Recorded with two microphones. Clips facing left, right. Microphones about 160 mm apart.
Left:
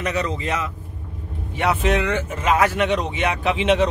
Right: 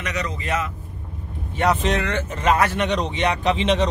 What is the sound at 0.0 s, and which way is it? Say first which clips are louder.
Speech: left 4 dB; 30° left (ahead or behind).